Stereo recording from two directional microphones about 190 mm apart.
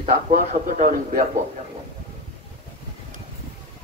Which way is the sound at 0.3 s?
45° right (ahead or behind).